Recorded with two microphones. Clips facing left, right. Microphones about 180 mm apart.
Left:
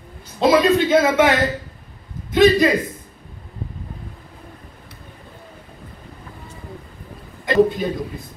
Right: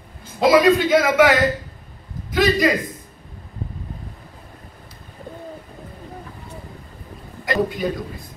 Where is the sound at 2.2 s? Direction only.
25° left (ahead or behind).